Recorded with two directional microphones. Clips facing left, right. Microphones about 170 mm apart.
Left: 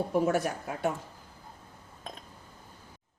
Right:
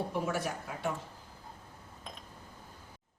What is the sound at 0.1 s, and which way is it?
Speech, 45° left (ahead or behind).